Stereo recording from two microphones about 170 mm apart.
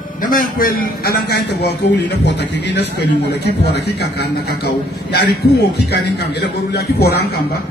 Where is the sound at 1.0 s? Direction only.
70° left (ahead or behind).